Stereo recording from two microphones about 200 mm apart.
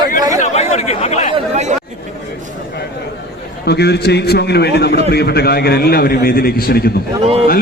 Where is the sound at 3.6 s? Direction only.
55° left (ahead or behind).